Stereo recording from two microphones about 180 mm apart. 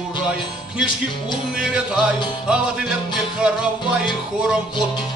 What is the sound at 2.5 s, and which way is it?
Music, 5° right (ahead or behind).